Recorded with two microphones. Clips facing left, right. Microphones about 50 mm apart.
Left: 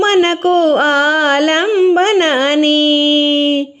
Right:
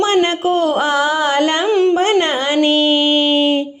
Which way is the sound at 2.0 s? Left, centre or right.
Left.